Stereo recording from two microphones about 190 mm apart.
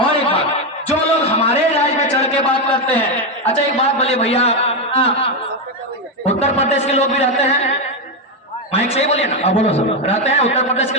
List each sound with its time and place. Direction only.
0.9 s a sound: 35° left (ahead or behind)
2.8 s a man's voice: 10° left (ahead or behind)
3.5 s a man's voice: 35° left (ahead or behind)
8.7 s a man's voice: 35° left (ahead or behind)